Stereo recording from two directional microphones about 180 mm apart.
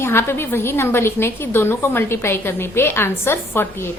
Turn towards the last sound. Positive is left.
turn(degrees=15)  # may be behind; listen again after turning